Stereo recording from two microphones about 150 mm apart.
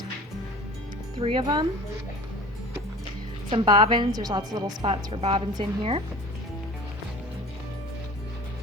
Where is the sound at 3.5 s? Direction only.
35° right (ahead or behind).